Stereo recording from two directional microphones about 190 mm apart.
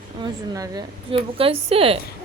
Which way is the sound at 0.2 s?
20° right (ahead or behind).